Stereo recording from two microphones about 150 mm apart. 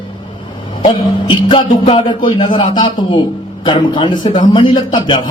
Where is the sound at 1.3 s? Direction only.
30° left (ahead or behind).